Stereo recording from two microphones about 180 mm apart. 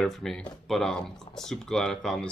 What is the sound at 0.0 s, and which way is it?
Speech, centre (ahead or behind).